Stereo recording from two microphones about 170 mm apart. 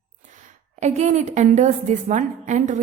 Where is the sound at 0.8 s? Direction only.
45° right (ahead or behind).